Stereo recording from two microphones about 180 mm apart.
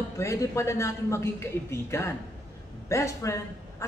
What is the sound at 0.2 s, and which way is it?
Speech, 15° left (ahead or behind).